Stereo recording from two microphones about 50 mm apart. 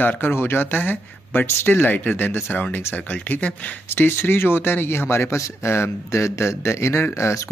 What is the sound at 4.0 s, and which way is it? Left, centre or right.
Speech, left.